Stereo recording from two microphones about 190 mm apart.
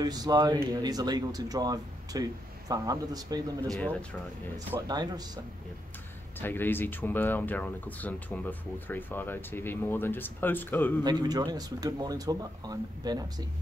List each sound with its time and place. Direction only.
0.0 s speech: 20° right (ahead or behind)
6.4 s speech: 10° left (ahead or behind)
11.1 s speech: 20° right (ahead or behind)